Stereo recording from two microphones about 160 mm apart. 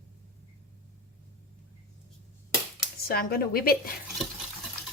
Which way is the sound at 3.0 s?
70° left (ahead or behind).